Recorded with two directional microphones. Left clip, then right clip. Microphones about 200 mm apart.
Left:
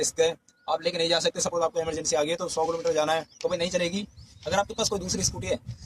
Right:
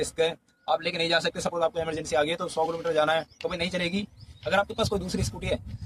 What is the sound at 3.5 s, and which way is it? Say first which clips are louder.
Speech: left 5 dB; 25° right (ahead or behind).